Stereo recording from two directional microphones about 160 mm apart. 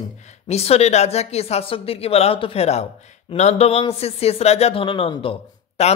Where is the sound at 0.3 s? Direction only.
40° left (ahead or behind).